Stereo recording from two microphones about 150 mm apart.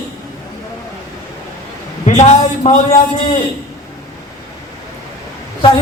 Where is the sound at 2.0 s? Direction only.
50° left (ahead or behind).